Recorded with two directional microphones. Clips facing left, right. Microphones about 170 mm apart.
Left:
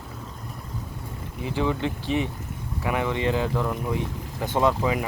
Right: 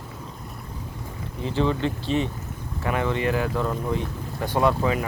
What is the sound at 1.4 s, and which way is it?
Speech, 15° left (ahead or behind).